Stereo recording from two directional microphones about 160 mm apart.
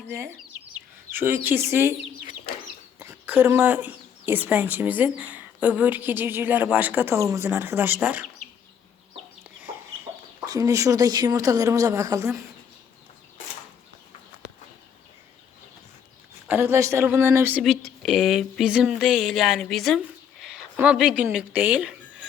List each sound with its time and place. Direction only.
0.1 s speech: 15° right (ahead or behind)
3.0 s speech: 15° right (ahead or behind)
9.4 s chicken: 10° right (ahead or behind)
10.5 s a woman's voice: 20° right (ahead or behind)
16.5 s speech: 15° right (ahead or behind)
17.6 s speech: centre (ahead or behind)
20.4 s a sound: 5° right (ahead or behind)
21.3 s speech: 10° right (ahead or behind)